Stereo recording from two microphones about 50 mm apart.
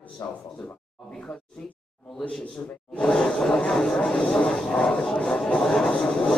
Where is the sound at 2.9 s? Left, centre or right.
Centre.